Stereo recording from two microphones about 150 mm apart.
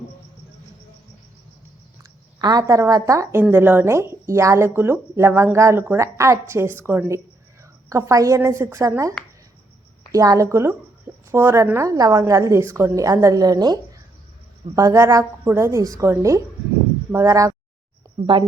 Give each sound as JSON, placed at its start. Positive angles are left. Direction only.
{"t": 2.4, "sound": "a woman's voice", "side_deg": -25}
{"t": 14.8, "sound": "a woman's voice", "side_deg": -20}
{"t": 18.3, "sound": "a woman's voice", "side_deg": -30}